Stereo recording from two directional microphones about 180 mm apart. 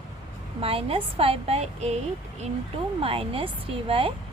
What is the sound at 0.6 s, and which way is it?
Speech, 30° right (ahead or behind).